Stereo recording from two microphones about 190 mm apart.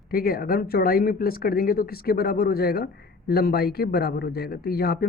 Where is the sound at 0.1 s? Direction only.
50° left (ahead or behind).